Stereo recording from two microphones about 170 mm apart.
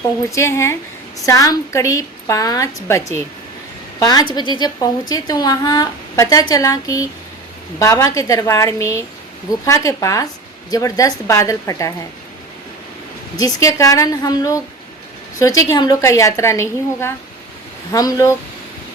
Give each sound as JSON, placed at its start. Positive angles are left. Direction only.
{"t": 0.3, "sound": "a woman's voice", "side_deg": 15}
{"t": 13.3, "sound": "a woman's voice", "side_deg": 20}